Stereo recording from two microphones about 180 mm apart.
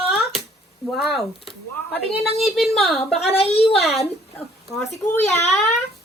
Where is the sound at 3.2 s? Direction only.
35° left (ahead or behind).